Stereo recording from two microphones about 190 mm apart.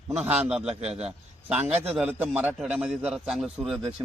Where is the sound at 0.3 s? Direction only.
5° right (ahead or behind).